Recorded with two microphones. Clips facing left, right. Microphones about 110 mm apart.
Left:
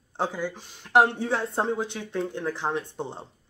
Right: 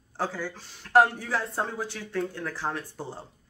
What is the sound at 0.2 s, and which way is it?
Speech, 15° left (ahead or behind).